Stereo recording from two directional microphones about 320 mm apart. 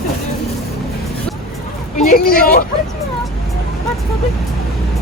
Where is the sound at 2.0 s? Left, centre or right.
Left.